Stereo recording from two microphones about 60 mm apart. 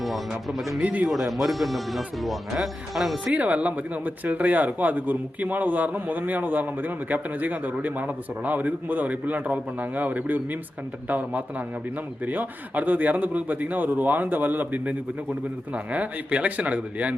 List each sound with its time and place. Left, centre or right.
0.8 s speech: centre
1.1 s speech: centre
3.3 s speech: right